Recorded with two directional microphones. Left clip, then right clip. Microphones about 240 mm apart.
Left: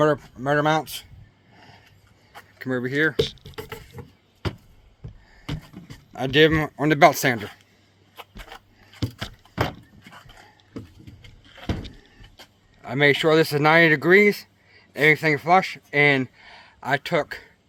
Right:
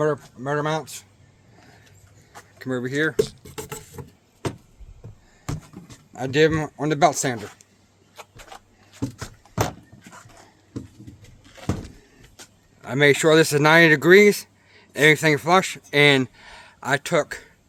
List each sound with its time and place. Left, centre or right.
0.0 s speech: left
2.6 s speech: centre
3.5 s patter: centre
6.1 s speech: centre
9.1 s a sound: centre
12.8 s speech: centre